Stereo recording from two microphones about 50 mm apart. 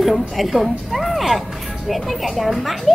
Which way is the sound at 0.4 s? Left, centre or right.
Centre.